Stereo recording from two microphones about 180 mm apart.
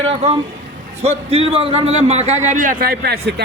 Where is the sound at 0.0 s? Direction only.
35° right (ahead or behind).